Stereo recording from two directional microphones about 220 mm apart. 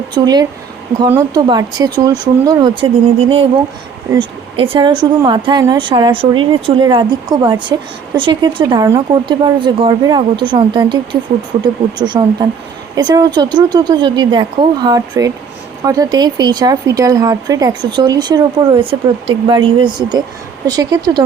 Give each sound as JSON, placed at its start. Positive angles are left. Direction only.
{"t": 0.1, "sound": "speech", "side_deg": -20}